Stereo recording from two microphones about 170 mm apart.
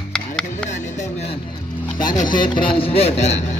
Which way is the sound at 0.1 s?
5° left (ahead or behind).